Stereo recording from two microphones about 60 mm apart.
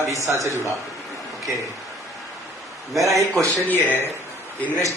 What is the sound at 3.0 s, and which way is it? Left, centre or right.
Speech, right.